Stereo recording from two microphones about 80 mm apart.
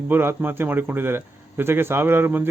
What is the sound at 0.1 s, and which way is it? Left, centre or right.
Speech, right.